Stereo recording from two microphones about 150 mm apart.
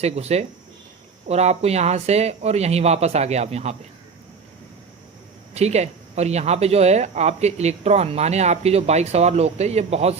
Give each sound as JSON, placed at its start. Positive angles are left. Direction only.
{"t": 0.0, "sound": "speech", "side_deg": -45}
{"t": 5.5, "sound": "speech", "side_deg": -45}